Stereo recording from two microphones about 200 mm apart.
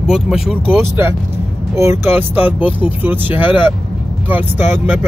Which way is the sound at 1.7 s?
15° right (ahead or behind).